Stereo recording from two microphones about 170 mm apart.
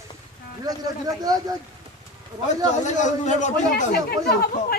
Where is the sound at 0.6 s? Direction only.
20° right (ahead or behind).